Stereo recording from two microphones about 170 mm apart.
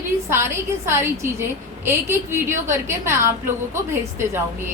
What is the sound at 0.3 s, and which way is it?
A woman's voice, 15° right (ahead or behind).